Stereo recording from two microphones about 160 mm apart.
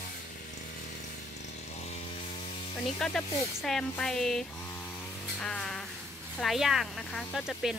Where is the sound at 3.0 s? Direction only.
5° left (ahead or behind).